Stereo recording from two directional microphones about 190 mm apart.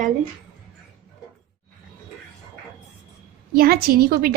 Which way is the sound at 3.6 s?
55° right (ahead or behind).